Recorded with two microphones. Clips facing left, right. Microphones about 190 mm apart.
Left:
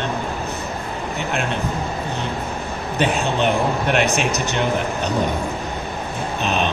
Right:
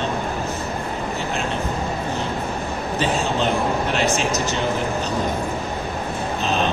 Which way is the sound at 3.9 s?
65° left (ahead or behind).